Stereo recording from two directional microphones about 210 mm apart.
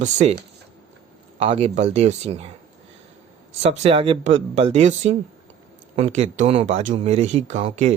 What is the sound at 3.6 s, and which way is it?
Speech, 30° right (ahead or behind).